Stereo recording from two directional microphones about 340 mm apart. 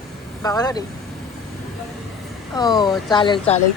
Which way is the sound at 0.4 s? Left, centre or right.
Centre.